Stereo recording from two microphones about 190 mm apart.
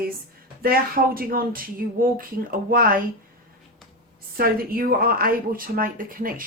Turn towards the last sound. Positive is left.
turn(degrees=-45)  # may be behind; listen again after turning